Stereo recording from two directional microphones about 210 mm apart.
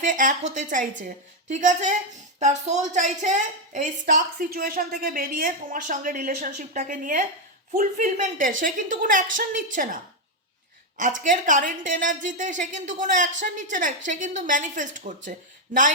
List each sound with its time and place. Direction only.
0.0 s a woman's voice: 40° right (ahead or behind)
11.2 s a woman's voice: 40° right (ahead or behind)